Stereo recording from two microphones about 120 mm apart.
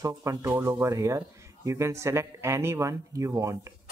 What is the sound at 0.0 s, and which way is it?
Speech, 25° right (ahead or behind).